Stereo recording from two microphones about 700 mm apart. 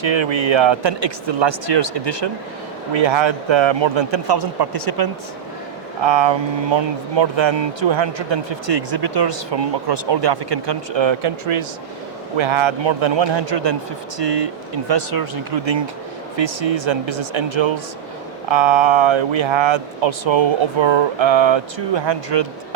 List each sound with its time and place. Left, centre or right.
0.0 s speech: right